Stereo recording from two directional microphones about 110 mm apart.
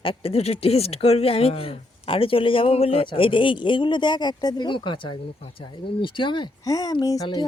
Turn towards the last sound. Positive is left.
turn(degrees=30)  # may be behind; listen again after turning